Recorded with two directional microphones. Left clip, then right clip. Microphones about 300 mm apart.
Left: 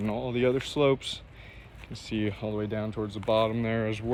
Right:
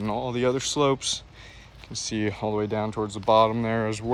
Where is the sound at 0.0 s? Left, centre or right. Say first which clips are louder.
Right 2 dB; centre.